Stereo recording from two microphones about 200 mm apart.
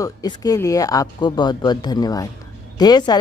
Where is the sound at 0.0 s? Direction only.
20° left (ahead or behind).